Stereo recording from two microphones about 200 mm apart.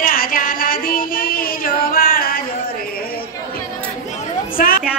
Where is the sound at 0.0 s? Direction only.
45° left (ahead or behind).